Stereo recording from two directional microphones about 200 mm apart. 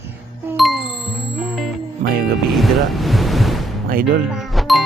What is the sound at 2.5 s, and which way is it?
Speech, centre (ahead or behind).